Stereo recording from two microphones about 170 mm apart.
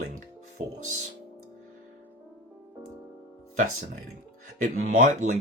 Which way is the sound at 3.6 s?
50° right (ahead or behind).